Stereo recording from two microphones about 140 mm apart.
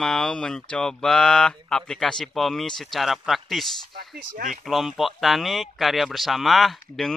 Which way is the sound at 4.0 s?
90° right.